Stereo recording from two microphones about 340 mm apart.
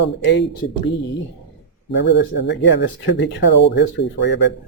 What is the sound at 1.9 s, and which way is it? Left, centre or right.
Speech, left.